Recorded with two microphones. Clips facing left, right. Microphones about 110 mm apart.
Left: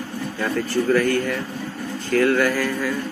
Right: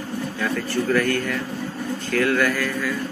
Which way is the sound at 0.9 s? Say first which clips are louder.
Left 1 dB; 15° left (ahead or behind).